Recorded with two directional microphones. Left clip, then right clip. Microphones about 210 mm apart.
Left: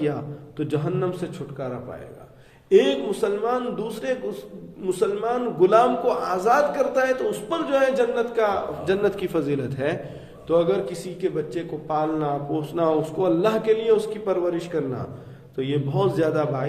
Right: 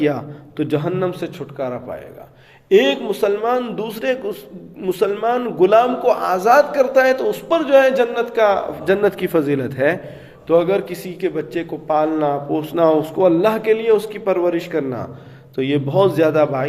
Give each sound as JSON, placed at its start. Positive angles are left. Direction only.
{"t": 0.0, "sound": "a man's voice", "side_deg": -30}